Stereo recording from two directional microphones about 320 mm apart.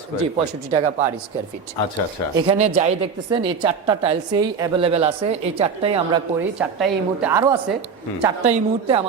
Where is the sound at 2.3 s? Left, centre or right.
Centre.